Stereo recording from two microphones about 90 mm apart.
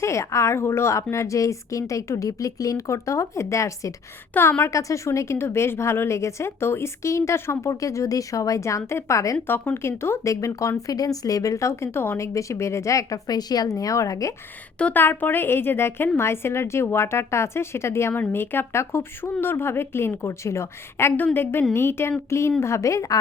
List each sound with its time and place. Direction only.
0.0 s a woman's voice: 35° left (ahead or behind)
9.5 s a woman's voice: 25° left (ahead or behind)
14.8 s a woman's voice: 20° left (ahead or behind); by 23.1 s 35° left (ahead or behind)